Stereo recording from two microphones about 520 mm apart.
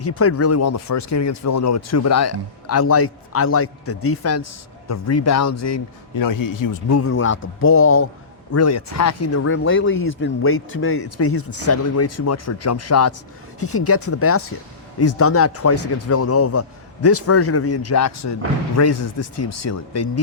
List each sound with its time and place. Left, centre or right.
0.0 s speech: left